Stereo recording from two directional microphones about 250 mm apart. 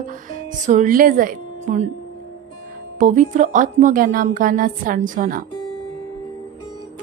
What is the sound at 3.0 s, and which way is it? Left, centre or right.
A woman's voice, right.